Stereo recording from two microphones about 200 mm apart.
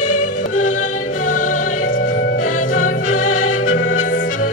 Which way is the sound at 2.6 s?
40° left (ahead or behind).